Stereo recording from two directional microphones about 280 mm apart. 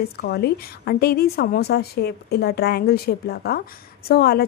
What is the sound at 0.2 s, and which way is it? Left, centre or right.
A woman's voice, left.